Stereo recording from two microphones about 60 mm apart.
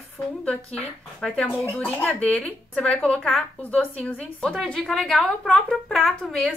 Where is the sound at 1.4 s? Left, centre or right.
Left.